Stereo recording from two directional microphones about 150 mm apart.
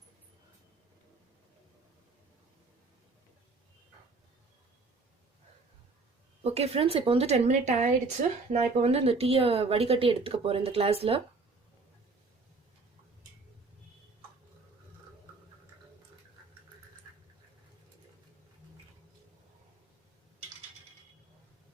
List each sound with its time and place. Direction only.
6.4 s speech: 45° right (ahead or behind)
8.4 s speech: 45° right (ahead or behind)